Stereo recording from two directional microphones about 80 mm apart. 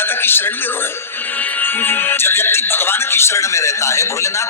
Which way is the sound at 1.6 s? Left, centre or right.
Left.